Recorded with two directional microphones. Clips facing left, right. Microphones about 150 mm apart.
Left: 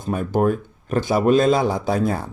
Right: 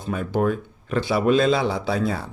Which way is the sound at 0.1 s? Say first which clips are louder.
Left 3 dB; 45° left (ahead or behind).